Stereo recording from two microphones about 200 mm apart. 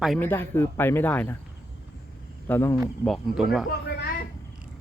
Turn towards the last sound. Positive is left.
turn(degrees=50)  # may be behind; listen again after turning